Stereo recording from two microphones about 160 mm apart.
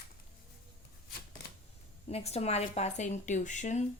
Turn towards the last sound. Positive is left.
turn(degrees=50)  # may be behind; listen again after turning